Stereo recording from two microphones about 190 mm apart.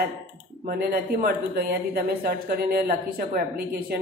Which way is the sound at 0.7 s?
55° right (ahead or behind).